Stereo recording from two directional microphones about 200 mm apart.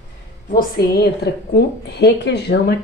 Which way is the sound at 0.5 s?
50° left (ahead or behind).